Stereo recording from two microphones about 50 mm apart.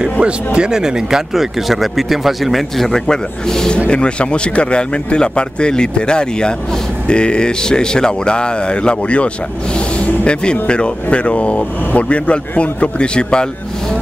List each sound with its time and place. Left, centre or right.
0.0 s speech: centre